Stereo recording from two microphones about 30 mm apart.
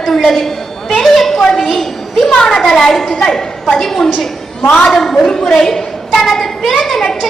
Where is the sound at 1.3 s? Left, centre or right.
Centre.